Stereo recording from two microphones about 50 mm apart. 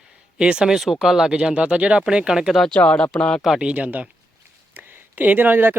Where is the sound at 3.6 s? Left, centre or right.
Right.